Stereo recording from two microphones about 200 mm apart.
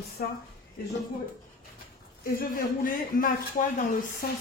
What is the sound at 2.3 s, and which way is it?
A man's voice, 45° left (ahead or behind).